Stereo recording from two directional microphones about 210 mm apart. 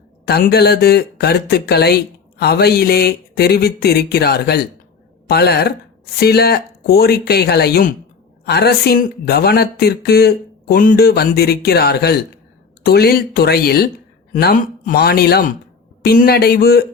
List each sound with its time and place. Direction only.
0.3 s speech: 50° left (ahead or behind)